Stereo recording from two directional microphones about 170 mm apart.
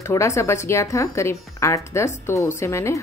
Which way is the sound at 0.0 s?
15° left (ahead or behind).